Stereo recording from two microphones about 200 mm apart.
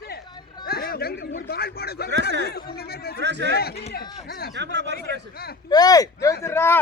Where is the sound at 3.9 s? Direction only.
50° left (ahead or behind).